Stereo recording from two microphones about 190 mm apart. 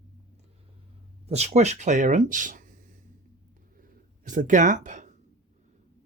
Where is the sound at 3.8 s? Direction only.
40° right (ahead or behind).